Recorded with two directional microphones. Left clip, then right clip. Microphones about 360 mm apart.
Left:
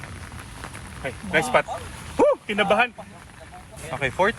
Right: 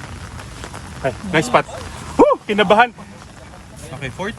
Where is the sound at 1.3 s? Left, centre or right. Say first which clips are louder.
Right 4 dB; right.